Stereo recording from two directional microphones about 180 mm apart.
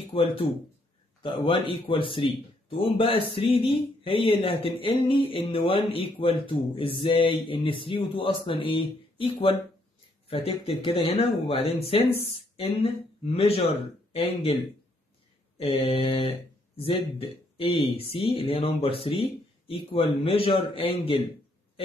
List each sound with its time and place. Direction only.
0.1 s speech: 30° left (ahead or behind)